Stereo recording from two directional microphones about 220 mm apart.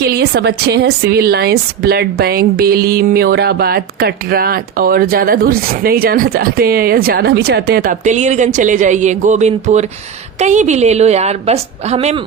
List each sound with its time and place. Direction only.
0.1 s a woman's voice: 45° right (ahead or behind); by 12.2 s 25° right (ahead or behind)